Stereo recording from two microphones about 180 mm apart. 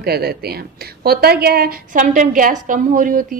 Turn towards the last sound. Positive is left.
turn(degrees=-50)  # may be behind; listen again after turning